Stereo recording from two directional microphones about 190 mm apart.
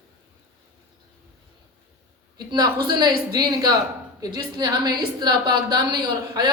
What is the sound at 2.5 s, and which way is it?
A woman's voice, 25° right (ahead or behind).